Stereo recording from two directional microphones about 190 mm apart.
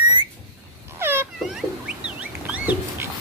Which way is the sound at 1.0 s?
10° right (ahead or behind).